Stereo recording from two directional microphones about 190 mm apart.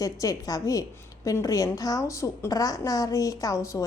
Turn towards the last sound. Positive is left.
turn(degrees=15)  # may be behind; listen again after turning